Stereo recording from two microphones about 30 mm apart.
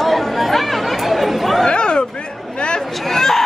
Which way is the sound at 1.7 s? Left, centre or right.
Left.